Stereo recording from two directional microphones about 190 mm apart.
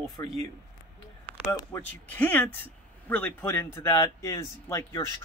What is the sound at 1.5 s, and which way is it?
Speech, 15° left (ahead or behind).